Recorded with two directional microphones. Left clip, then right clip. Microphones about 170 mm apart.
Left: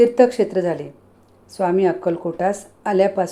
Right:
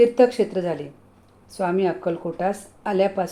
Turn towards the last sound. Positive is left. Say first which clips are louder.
# left 4 dB
turn(degrees=15)  # may be behind; listen again after turning